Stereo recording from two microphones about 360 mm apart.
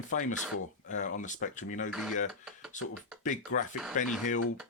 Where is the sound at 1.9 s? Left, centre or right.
Centre.